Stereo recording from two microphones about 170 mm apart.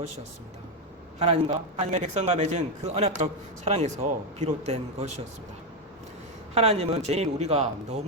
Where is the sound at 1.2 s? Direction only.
35° right (ahead or behind).